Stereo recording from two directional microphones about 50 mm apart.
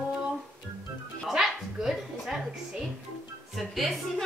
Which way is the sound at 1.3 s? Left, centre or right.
Centre.